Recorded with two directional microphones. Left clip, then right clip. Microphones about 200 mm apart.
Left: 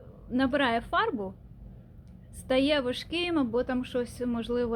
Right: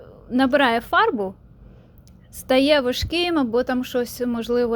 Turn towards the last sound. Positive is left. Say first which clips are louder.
# right 8 dB
turn(degrees=-30)  # may be behind; listen again after turning